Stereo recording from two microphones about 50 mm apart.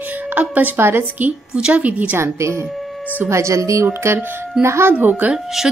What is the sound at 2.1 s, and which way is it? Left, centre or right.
Speech, right.